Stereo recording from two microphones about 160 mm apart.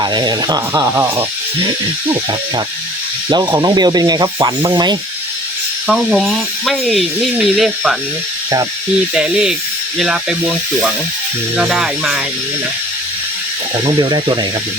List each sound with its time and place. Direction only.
0.0 s rub: 25° right (ahead or behind)
3.2 s rub: 30° right (ahead or behind)
5.9 s speech: centre (ahead or behind)
9.1 s speech: 5° right (ahead or behind)
11.5 s speech: 5° right (ahead or behind)
14.0 s rub: 25° right (ahead or behind)